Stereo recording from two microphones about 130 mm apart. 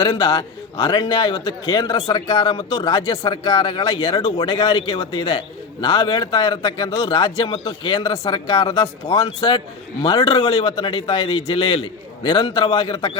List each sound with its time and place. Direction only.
0.2 s a man's voice: 45° left (ahead or behind)